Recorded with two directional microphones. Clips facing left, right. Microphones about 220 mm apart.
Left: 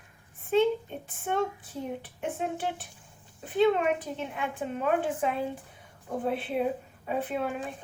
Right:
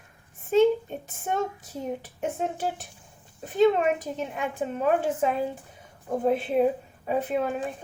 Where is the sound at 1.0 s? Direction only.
40° right (ahead or behind).